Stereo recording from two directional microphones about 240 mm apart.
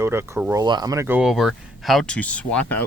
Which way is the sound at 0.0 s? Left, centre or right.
Centre.